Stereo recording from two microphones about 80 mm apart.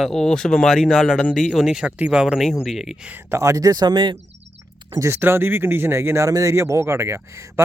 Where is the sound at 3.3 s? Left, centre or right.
Right.